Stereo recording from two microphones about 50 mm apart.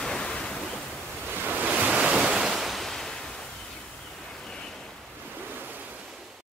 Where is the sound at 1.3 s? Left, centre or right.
Right.